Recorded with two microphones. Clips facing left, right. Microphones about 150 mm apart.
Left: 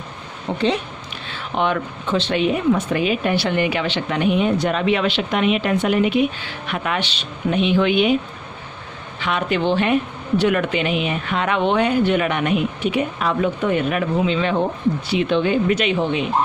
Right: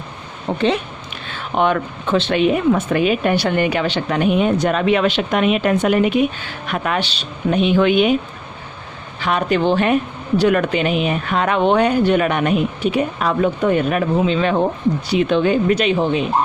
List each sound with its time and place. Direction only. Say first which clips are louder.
0.5 s speech: right 2 dB; 40° right (ahead or behind)
9.1 s speech: right 3 dB; 40° right (ahead or behind)